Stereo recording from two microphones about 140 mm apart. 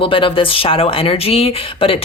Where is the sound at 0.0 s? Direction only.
40° left (ahead or behind).